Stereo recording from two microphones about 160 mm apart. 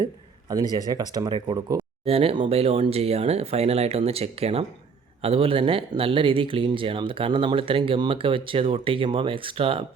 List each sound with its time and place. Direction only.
0.0 s a sound: 25° right (ahead or behind)
0.9 s speech: 25° right (ahead or behind)
2.0 s speech: 35° right (ahead or behind)